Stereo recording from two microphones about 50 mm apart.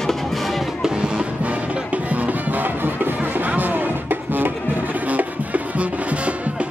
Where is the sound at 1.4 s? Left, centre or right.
Right.